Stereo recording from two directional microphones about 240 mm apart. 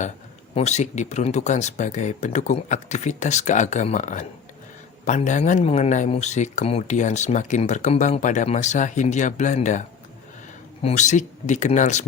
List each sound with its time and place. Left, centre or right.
0.5 s speech: left
10.8 s speech: left